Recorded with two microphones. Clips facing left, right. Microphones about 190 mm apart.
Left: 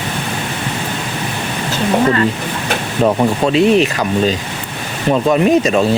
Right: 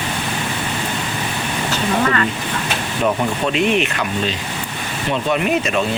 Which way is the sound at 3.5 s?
35° left (ahead or behind).